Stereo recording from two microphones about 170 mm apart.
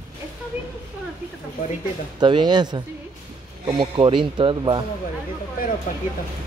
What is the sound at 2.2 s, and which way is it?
Speech, 25° right (ahead or behind).